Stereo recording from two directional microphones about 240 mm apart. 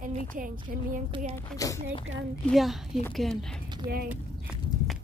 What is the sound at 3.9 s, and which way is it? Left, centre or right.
Speech, right.